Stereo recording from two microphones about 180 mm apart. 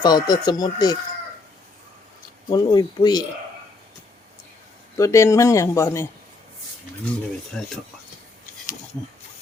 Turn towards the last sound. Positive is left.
turn(degrees=5)  # may be behind; listen again after turning